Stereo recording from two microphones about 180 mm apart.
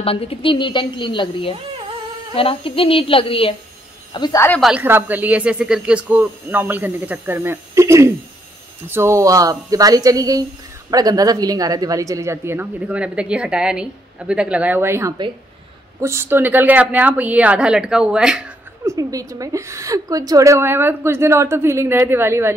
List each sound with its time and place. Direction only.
0.0 s a woman's voice: 30° left (ahead or behind); by 4.6 s 15° left (ahead or behind)
4.6 s speech: 5° right (ahead or behind)
18.9 s speech: 20° right (ahead or behind)